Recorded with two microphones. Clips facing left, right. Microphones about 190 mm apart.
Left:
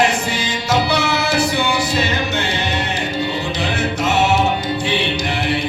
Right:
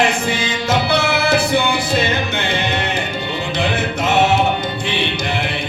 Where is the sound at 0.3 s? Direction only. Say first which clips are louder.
Right 1 dB; 55° right (ahead or behind).